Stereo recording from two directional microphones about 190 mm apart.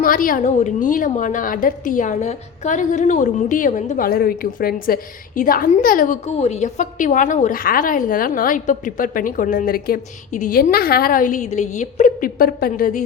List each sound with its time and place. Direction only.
0.0 s a woman's voice: 45° left (ahead or behind)